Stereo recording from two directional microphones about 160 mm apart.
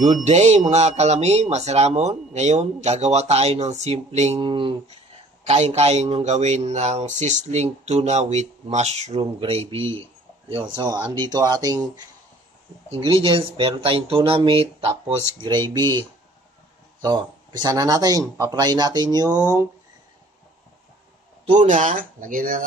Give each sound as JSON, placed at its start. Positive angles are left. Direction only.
{"t": 0.2, "sound": "speech", "side_deg": -45}
{"t": 4.5, "sound": "speech", "side_deg": -35}
{"t": 13.0, "sound": "speech", "side_deg": -30}
{"t": 17.0, "sound": "speech", "side_deg": -25}
{"t": 21.5, "sound": "speech", "side_deg": -50}